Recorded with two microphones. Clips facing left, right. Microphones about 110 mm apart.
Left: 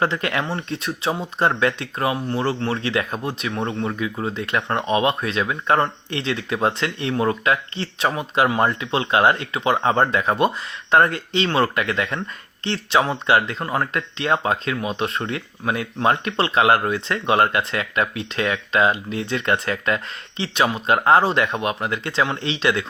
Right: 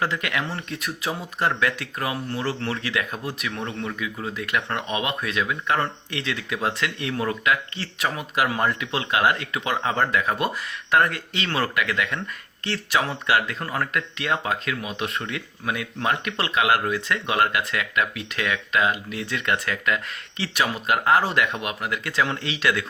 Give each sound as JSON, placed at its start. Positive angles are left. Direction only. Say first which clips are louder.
{"t": 0.0, "sound": "speech", "louder": "left 4 dB", "side_deg": 30}